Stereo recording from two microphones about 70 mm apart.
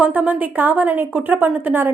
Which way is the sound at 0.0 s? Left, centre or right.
Right.